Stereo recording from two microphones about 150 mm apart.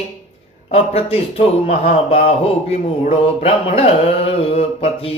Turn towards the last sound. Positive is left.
turn(degrees=40)  # may be behind; listen again after turning